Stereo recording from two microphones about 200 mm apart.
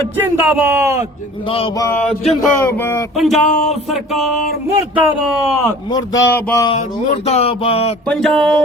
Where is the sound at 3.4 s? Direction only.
35° left (ahead or behind).